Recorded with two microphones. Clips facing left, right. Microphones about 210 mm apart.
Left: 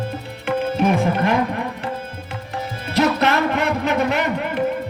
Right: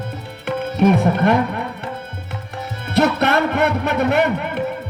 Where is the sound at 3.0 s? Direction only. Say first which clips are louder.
Right 1 dB; 65° right (ahead or behind).